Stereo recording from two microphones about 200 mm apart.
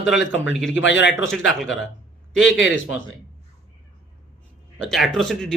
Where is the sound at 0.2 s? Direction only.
65° left (ahead or behind).